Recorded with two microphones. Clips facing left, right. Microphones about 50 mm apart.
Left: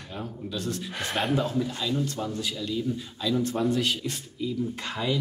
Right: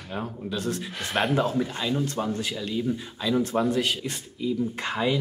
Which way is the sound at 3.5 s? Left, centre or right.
Centre.